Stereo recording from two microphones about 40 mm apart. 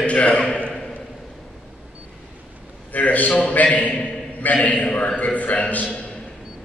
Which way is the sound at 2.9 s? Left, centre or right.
Left.